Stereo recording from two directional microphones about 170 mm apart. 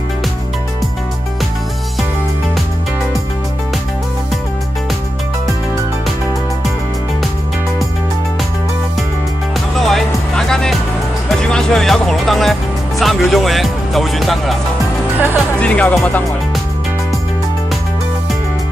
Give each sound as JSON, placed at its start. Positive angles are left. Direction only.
{"t": 9.8, "sound": "music", "side_deg": 0}
{"t": 15.6, "sound": "speech", "side_deg": 5}